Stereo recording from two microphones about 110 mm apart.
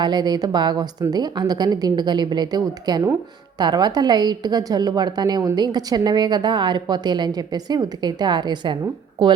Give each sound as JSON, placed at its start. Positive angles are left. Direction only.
{"t": 0.0, "sound": "a woman's voice", "side_deg": -40}